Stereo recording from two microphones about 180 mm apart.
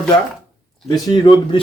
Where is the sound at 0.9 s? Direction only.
25° left (ahead or behind).